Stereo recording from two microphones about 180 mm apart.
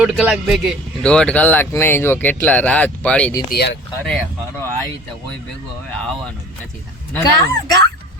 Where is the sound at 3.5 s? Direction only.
65° left (ahead or behind).